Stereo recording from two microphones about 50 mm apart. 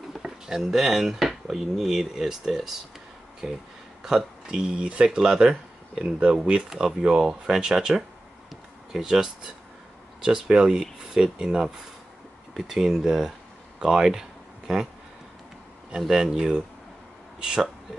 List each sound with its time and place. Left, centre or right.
0.2 s drawer open or close: centre
0.6 s speech: centre
4.5 s speech: centre
16.0 s speech: centre